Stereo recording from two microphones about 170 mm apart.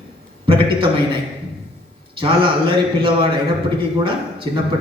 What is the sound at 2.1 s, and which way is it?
Speech, 30° right (ahead or behind).